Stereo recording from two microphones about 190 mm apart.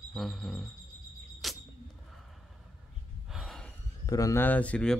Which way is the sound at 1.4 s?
Centre (ahead or behind).